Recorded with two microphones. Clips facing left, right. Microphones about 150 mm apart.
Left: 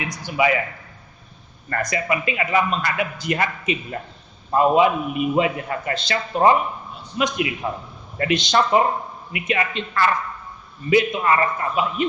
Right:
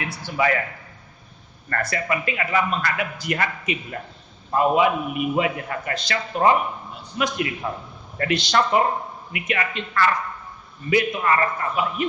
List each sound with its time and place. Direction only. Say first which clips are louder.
0.0 s a man's voice: left 2 dB; 15° left (ahead or behind)
1.7 s a man's voice: left 2 dB; 15° left (ahead or behind)